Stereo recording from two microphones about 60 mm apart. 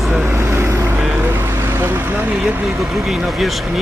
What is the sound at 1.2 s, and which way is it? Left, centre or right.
Vehicle, right.